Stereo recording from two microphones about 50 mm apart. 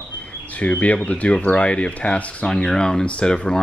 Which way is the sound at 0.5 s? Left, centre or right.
Left.